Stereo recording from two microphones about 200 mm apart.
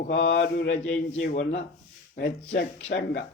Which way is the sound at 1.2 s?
45° left (ahead or behind).